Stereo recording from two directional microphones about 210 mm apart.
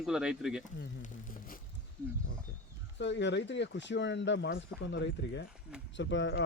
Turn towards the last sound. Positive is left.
turn(degrees=55)  # may be behind; listen again after turning